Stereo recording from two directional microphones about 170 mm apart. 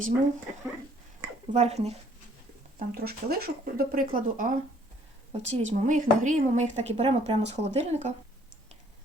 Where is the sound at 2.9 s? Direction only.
65° right (ahead or behind).